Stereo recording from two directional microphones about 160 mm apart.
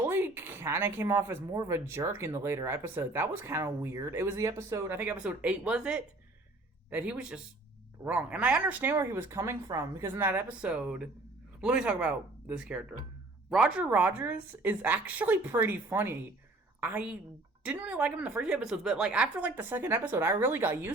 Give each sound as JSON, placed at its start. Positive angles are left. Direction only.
{"t": 0.0, "sound": "speech", "side_deg": -15}